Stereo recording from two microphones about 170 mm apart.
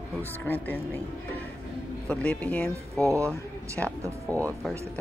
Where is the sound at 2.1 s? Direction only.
5° left (ahead or behind).